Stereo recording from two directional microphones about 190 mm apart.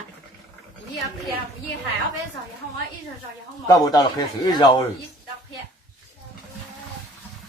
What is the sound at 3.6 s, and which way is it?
Speech, 20° left (ahead or behind).